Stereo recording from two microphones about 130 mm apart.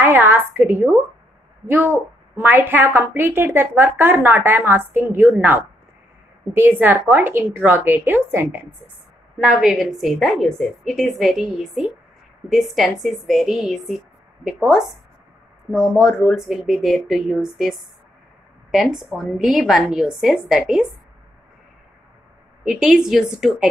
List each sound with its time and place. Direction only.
0.0 s a woman's voice: 15° right (ahead or behind)
6.8 s a woman's voice: 15° right (ahead or behind)
9.4 s a woman's voice: 5° right (ahead or behind)
22.7 s a woman's voice: 5° right (ahead or behind)